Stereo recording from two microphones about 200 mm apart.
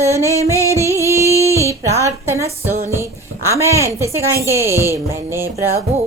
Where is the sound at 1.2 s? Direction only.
15° left (ahead or behind).